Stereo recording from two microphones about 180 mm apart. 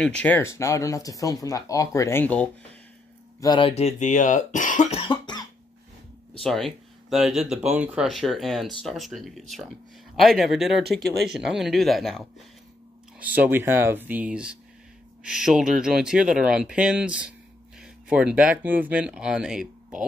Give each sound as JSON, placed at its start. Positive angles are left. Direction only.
{"t": 0.0, "sound": "speech", "side_deg": 5}
{"t": 3.3, "sound": "speech", "side_deg": 25}
{"t": 6.4, "sound": "speech", "side_deg": 0}
{"t": 13.2, "sound": "speech", "side_deg": -10}